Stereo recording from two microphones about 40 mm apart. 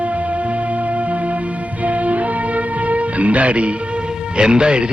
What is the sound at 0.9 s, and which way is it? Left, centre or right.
Music, right.